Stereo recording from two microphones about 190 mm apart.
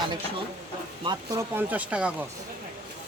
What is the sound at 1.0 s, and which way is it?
Speech, 15° right (ahead or behind).